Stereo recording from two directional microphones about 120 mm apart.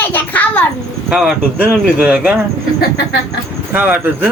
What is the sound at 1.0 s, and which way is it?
Speech, 5° right (ahead or behind).